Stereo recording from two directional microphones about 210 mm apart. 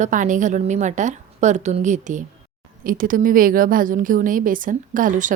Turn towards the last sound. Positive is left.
turn(degrees=-40)  # may be behind; listen again after turning